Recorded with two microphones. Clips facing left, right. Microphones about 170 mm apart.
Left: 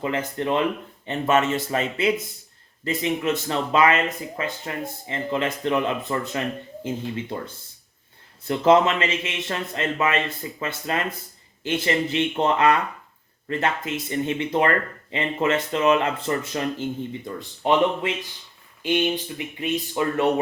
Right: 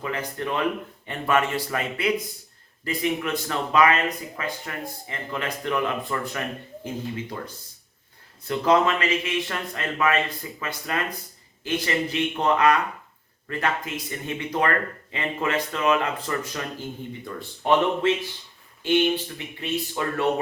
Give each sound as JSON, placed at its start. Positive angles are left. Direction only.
{"t": 0.0, "sound": "speech", "side_deg": 25}